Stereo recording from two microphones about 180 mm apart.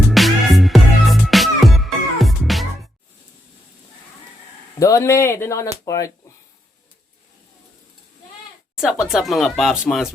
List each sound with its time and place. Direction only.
0.1 s music: centre (ahead or behind)
4.8 s speech: 15° left (ahead or behind)
8.8 s speech: centre (ahead or behind)